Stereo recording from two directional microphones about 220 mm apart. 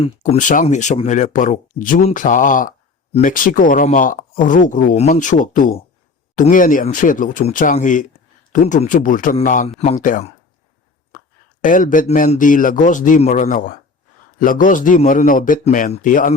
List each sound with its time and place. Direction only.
0.0 s speech: 30° left (ahead or behind)
11.6 s speech: 35° left (ahead or behind)